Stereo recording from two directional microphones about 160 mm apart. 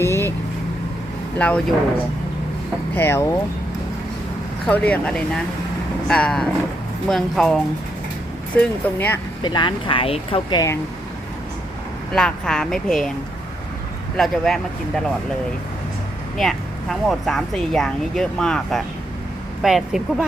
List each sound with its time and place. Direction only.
0.0 s vehicle: 15° left (ahead or behind)
1.4 s speech: 10° left (ahead or behind)
2.9 s speech: 15° left (ahead or behind)
4.6 s speech: 10° left (ahead or behind)
9.4 s speech: 30° left (ahead or behind)
12.1 s speech: 5° left (ahead or behind)
14.2 s speech: centre (ahead or behind)
16.4 s speech: centre (ahead or behind)